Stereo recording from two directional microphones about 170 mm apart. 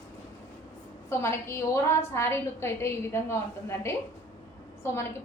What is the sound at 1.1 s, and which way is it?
A woman's voice, 15° left (ahead or behind).